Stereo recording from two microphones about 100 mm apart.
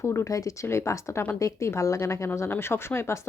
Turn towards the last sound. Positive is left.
turn(degrees=25)  # may be behind; listen again after turning